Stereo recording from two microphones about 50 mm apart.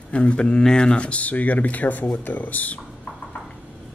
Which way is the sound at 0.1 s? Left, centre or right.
Left.